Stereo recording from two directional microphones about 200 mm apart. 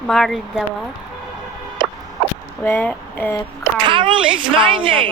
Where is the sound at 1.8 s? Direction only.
25° right (ahead or behind).